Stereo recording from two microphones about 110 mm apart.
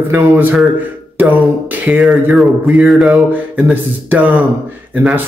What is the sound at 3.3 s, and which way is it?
A man's voice, 15° right (ahead or behind).